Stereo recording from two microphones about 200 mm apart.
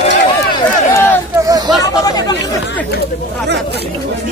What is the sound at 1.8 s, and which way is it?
Speech, 20° left (ahead or behind).